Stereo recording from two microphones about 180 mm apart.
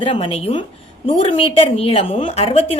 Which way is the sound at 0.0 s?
30° left (ahead or behind).